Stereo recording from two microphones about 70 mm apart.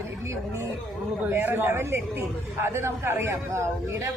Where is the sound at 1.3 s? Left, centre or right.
Right.